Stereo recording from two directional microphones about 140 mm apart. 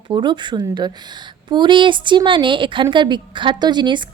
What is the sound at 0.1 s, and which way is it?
A woman's voice, 35° right (ahead or behind).